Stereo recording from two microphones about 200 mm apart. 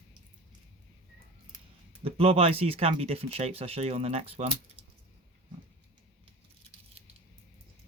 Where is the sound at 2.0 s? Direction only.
30° right (ahead or behind).